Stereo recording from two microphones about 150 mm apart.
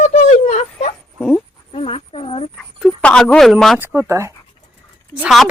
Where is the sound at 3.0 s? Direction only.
5° left (ahead or behind).